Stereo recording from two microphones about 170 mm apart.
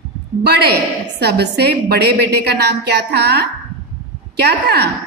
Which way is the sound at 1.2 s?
75° right (ahead or behind).